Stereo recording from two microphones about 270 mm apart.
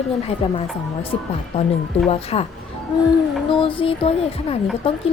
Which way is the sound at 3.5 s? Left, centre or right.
Centre.